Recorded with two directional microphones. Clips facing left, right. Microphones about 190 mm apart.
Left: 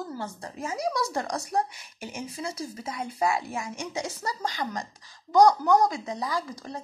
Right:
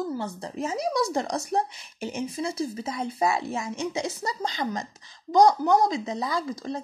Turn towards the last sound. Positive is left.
turn(degrees=-25)  # may be behind; listen again after turning